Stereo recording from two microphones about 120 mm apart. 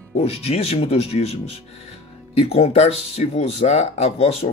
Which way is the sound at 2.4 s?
60° left (ahead or behind).